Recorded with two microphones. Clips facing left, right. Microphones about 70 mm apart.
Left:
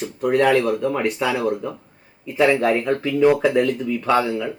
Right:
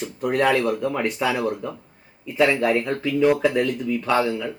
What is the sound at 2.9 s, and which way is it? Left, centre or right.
Speech, left.